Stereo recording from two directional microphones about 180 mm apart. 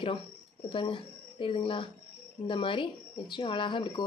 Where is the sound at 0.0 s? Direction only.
30° left (ahead or behind).